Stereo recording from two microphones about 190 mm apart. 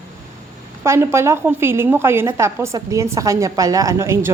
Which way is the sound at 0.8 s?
15° right (ahead or behind).